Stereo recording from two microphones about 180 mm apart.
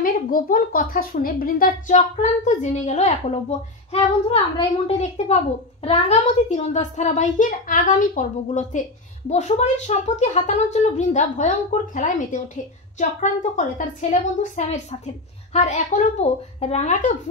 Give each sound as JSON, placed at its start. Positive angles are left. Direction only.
{"t": 0.0, "sound": "a woman's voice", "side_deg": 50}